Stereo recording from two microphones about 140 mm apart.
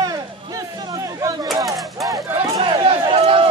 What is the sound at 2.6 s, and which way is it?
Run, 35° right (ahead or behind).